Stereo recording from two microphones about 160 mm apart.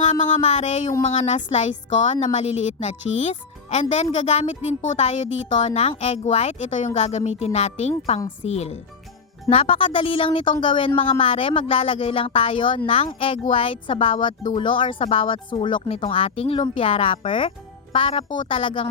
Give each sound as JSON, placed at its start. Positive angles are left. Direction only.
{"t": 0.0, "sound": "speech", "side_deg": 45}